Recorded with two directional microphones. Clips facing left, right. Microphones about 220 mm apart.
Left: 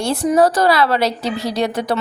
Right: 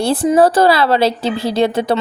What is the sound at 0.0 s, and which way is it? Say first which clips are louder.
A woman's voice: right 3 dB; 30° right (ahead or behind).